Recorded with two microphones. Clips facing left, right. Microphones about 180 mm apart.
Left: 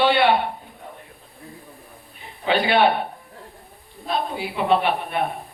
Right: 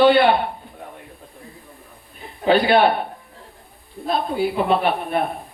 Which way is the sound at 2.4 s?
40° right (ahead or behind).